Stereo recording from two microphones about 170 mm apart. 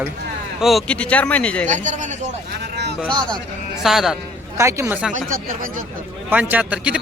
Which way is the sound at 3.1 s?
25° right (ahead or behind).